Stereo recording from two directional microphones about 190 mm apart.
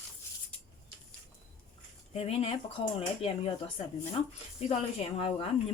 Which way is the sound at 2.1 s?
30° left (ahead or behind).